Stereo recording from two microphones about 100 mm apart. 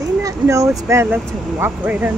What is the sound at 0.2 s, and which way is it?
Speech, 30° right (ahead or behind).